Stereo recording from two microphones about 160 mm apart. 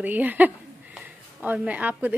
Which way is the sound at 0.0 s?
10° right (ahead or behind).